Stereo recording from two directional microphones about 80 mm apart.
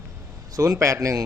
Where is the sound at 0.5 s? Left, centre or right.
Right.